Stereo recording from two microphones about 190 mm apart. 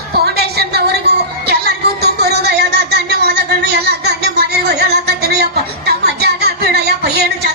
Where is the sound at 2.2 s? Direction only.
60° right (ahead or behind).